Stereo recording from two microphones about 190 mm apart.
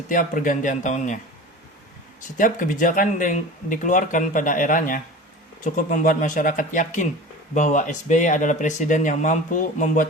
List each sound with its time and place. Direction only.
0.1 s speech: 45° left (ahead or behind)
2.4 s speech: 45° left (ahead or behind)